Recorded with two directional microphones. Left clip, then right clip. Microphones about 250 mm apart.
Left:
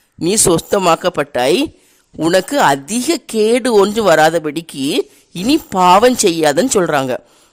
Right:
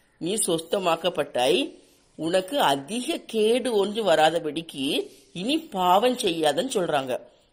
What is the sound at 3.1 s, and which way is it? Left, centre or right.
Speech, left.